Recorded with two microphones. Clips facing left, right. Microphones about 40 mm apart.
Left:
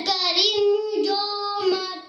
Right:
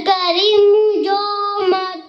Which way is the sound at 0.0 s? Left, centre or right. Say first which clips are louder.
Right 8 dB; right.